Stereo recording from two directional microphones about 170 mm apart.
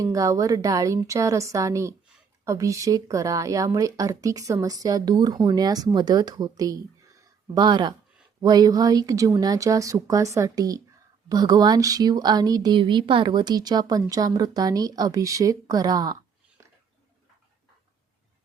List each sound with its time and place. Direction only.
0.0 s speech: 20° right (ahead or behind)